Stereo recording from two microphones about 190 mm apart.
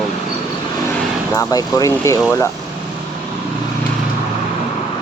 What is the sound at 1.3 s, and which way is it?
Speech, 20° left (ahead or behind).